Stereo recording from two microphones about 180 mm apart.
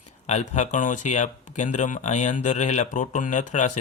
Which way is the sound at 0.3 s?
40° left (ahead or behind).